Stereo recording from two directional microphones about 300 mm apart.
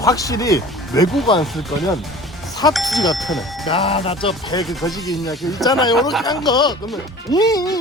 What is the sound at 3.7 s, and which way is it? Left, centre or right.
Speech, centre.